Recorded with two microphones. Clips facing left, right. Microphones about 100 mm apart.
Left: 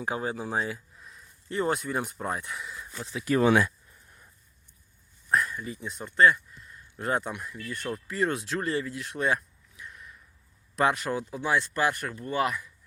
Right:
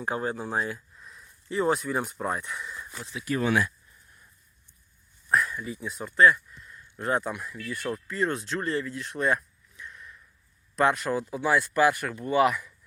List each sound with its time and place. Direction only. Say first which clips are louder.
0.0 s speech: right 1 dB; 5° left (ahead or behind)
1.0 s a sound: right 1 dB; centre (ahead or behind)
2.2 s speech: right 2 dB; centre (ahead or behind)
3.3 s speech: left 4 dB; 90° left
5.3 s speech: right 1 dB; centre (ahead or behind)